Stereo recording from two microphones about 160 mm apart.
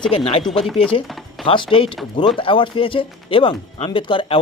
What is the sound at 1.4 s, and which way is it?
Speech, 30° left (ahead or behind).